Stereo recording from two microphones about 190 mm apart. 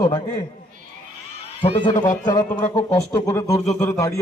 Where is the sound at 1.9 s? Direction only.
40° left (ahead or behind).